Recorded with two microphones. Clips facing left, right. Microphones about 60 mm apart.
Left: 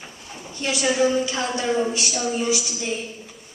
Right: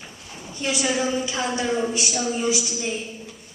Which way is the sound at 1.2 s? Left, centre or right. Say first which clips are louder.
Even; centre.